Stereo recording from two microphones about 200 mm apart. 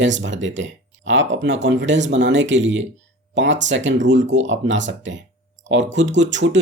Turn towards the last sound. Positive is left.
turn(degrees=-65)  # may be behind; listen again after turning